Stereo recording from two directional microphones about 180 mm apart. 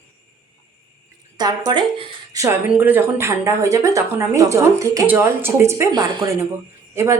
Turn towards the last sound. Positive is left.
turn(degrees=-15)  # may be behind; listen again after turning